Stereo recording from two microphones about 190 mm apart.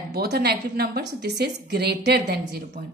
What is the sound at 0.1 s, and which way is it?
Speech, 55° right (ahead or behind).